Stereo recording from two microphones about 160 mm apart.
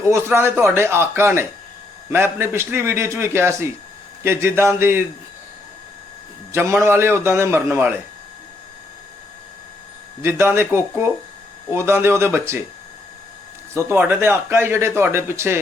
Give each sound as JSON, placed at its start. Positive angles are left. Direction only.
{"t": 0.1, "sound": "speech", "side_deg": -15}
{"t": 6.5, "sound": "speech", "side_deg": -15}
{"t": 10.2, "sound": "speech", "side_deg": -15}
{"t": 13.7, "sound": "speech", "side_deg": -10}